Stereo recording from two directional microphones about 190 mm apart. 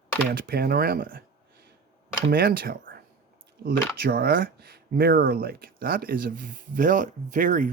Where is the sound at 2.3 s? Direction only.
50° right (ahead or behind).